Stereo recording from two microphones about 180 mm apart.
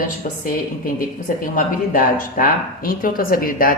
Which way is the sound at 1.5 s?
50° left (ahead or behind).